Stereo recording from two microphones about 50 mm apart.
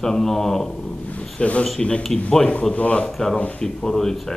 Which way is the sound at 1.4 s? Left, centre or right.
Left.